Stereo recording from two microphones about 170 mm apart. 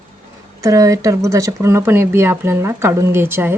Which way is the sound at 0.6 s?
20° right (ahead or behind).